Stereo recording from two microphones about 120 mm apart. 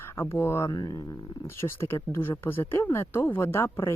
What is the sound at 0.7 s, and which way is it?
Speech, 35° left (ahead or behind).